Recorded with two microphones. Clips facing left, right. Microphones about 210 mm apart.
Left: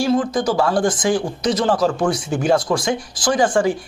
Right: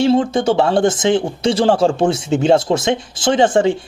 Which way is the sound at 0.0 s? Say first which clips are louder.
Right 4 dB; 25° right (ahead or behind).